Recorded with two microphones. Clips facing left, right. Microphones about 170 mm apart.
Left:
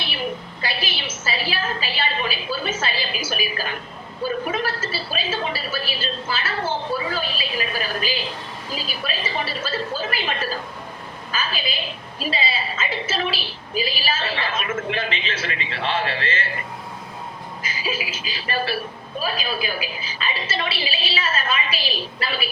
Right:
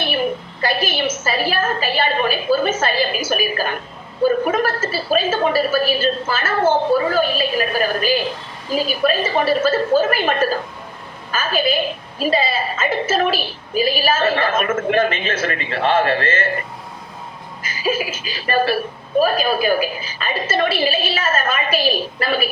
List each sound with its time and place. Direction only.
0.0 s a woman's voice: 50° right (ahead or behind)
17.6 s a woman's voice: 50° right (ahead or behind)